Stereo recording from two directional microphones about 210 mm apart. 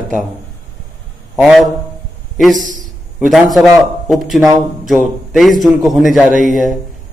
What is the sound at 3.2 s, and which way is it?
A man's voice, centre (ahead or behind).